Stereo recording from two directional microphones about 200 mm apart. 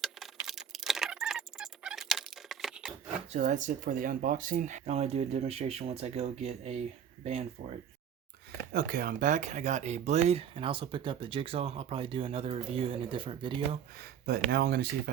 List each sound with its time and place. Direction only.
0.0 s a sound: centre (ahead or behind)
3.3 s speech: 40° right (ahead or behind)
8.7 s speech: 45° right (ahead or behind); by 13.5 s 25° right (ahead or behind)
14.0 s speech: 55° right (ahead or behind)